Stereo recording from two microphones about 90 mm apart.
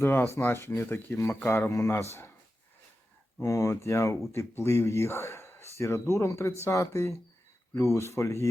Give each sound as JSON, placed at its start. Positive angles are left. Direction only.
{"t": 0.0, "sound": "speech", "side_deg": 25}
{"t": 3.4, "sound": "speech", "side_deg": 35}